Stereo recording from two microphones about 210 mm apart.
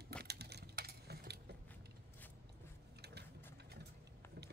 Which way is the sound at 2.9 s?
50° right (ahead or behind).